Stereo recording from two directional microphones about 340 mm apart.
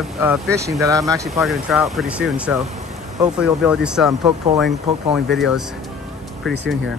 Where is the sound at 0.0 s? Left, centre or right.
Centre.